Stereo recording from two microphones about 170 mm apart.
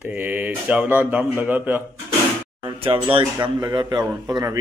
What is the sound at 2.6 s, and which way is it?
A man's voice, 30° right (ahead or behind).